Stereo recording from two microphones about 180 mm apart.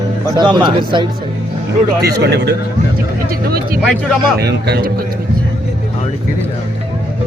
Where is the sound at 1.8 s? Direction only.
60° right (ahead or behind).